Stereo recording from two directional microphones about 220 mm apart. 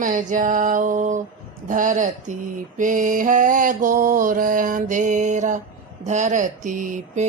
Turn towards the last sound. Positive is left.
turn(degrees=-35)  # may be behind; listen again after turning